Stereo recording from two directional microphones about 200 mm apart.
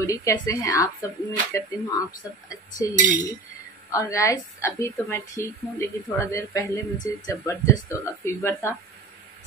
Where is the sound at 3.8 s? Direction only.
15° left (ahead or behind).